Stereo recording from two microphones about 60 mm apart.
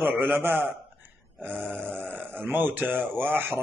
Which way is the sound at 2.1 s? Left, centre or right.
Right.